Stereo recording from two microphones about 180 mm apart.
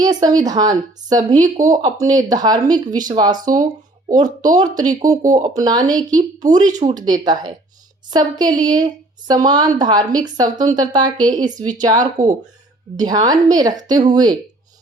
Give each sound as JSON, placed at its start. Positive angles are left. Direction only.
{"t": 0.0, "sound": "a woman's voice", "side_deg": -20}
{"t": 6.6, "sound": "speech", "side_deg": -45}
{"t": 6.9, "sound": "a woman's voice", "side_deg": -20}
{"t": 12.1, "sound": "speech", "side_deg": -40}
{"t": 13.0, "sound": "a woman's voice", "side_deg": -20}